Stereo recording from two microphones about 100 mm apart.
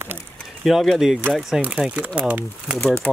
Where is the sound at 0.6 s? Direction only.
Centre (ahead or behind).